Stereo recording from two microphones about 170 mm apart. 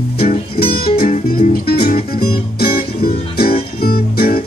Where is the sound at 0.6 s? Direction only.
60° left (ahead or behind).